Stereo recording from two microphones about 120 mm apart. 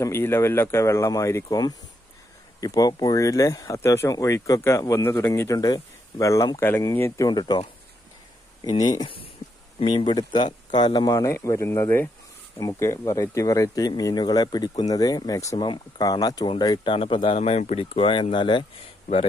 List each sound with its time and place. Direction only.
0.0 s speech: 20° left (ahead or behind)
7.2 s speech: 35° left (ahead or behind)
8.6 s speech: 35° left (ahead or behind)
17.4 s speech: 65° left (ahead or behind)
17.9 s speech: 45° left (ahead or behind)